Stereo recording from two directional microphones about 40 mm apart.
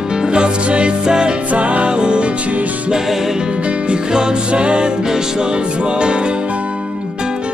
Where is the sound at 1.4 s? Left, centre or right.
Right.